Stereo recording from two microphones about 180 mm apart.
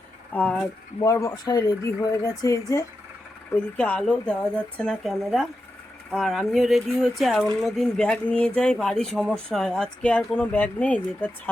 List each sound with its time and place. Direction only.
0.3 s speech: 5° left (ahead or behind)
0.9 s speech: 15° left (ahead or behind)
3.8 s speech: 5° left (ahead or behind)